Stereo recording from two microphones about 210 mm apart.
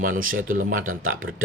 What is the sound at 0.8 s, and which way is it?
Speech, 75° right (ahead or behind).